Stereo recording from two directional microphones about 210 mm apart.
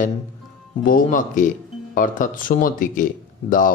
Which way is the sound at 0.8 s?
40° left (ahead or behind).